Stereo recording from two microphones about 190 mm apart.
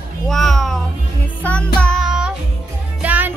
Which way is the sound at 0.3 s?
Centre (ahead or behind).